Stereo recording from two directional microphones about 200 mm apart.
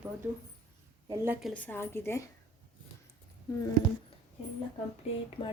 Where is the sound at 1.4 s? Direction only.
5° left (ahead or behind).